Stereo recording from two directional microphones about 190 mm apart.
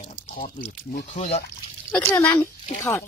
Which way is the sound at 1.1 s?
35° left (ahead or behind).